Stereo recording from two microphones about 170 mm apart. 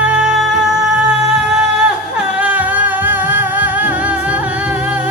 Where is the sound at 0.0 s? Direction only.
5° right (ahead or behind).